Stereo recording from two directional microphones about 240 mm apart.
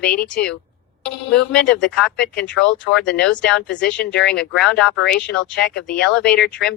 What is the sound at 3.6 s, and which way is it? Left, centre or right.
Speech, left.